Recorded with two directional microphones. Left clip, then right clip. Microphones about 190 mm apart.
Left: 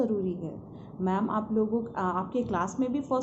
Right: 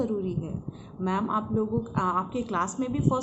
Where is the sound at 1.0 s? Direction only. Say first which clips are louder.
Right 1 dB; 15° right (ahead or behind).